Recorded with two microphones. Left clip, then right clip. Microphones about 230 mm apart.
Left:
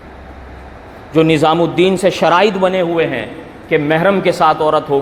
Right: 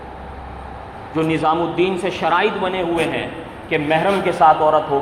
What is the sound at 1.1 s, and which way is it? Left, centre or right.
A man's voice, left.